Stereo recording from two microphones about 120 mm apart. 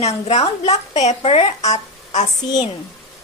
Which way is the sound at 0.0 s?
65° left (ahead or behind).